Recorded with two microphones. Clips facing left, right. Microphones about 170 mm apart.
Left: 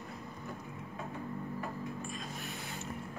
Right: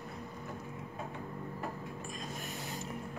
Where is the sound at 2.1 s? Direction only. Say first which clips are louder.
Even; 40° right (ahead or behind).